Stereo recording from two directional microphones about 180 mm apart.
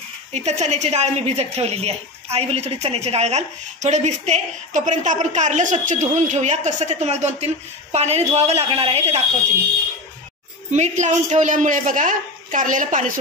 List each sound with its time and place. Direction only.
0.3 s a woman's voice: 40° right (ahead or behind)
10.7 s a man's voice: 40° right (ahead or behind)